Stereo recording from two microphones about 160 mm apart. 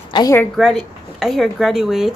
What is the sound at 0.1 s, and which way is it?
Speech, 25° left (ahead or behind).